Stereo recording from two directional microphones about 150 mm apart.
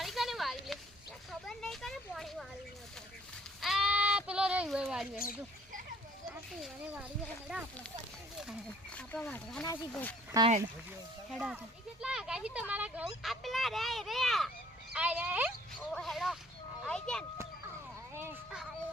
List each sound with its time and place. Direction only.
0.0 s a sound: centre (ahead or behind)
3.6 s sheep: centre (ahead or behind)
6.6 s speech: 5° right (ahead or behind)
9.0 s speech: 10° left (ahead or behind)
11.3 s speech: 5° right (ahead or behind)
14.9 s speech: 10° right (ahead or behind)
15.9 s a child's voice: centre (ahead or behind)
18.1 s children playing: 15° right (ahead or behind)